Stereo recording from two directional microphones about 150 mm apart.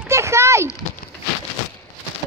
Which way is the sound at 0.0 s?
20° right (ahead or behind).